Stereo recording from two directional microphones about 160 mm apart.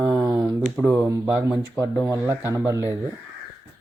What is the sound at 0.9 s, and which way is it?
A man's voice, 10° right (ahead or behind).